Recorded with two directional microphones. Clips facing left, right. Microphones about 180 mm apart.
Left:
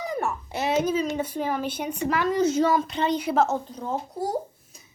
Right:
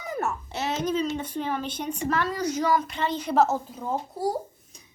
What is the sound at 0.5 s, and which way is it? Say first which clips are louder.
Speech: left 4 dB; 10° left (ahead or behind).